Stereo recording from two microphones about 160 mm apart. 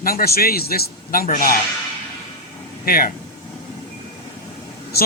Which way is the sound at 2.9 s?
65° left (ahead or behind).